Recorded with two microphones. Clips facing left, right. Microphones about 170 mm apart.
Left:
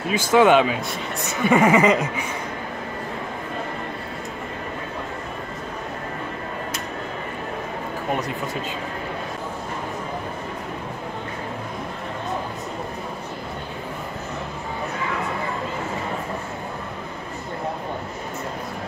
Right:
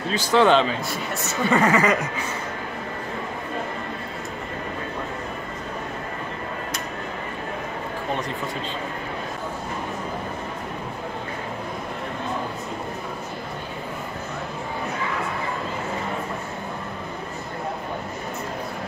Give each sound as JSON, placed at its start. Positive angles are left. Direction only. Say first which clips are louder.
{"t": 0.3, "sound": "speech", "louder": "left 2 dB", "side_deg": 10}